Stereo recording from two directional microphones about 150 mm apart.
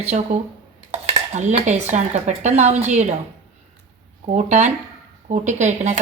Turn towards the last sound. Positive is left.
turn(degrees=-50)  # may be behind; listen again after turning